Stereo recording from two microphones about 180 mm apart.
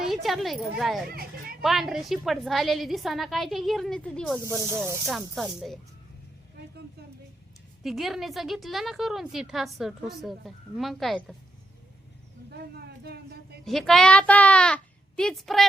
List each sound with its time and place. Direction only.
0.0 s a woman's voice: centre (ahead or behind)
1.0 s speech: 60° right (ahead or behind)
1.6 s a woman's voice: centre (ahead or behind)
4.4 s speech: 15° right (ahead or behind)
5.0 s a woman's voice: centre (ahead or behind)
7.9 s a woman's voice: centre (ahead or behind)
13.1 s a sound: 60° right (ahead or behind)
13.7 s a woman's voice: centre (ahead or behind)